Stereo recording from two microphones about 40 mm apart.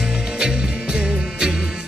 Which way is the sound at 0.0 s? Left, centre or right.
Centre.